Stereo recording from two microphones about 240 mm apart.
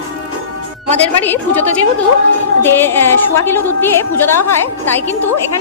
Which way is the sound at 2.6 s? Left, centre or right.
Centre.